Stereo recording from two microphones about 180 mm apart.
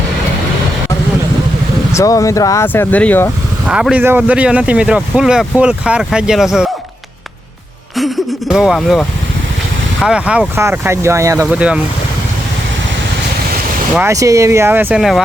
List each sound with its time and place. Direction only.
1.9 s speech: 15° left (ahead or behind)
3.7 s speech: 5° right (ahead or behind)
7.9 s a sound: centre (ahead or behind)
10.0 s speech: 5° right (ahead or behind)
11.4 s speech: 5° right (ahead or behind)
14.0 s speech: 20° right (ahead or behind); by 15.2 s centre (ahead or behind)